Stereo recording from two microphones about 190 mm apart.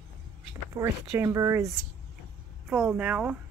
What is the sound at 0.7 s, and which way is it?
Speech, 15° right (ahead or behind).